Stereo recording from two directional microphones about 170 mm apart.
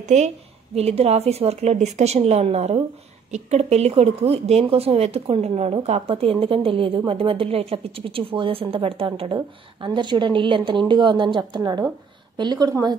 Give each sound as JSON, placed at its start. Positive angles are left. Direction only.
{"t": 0.7, "sound": "a woman's voice", "side_deg": -40}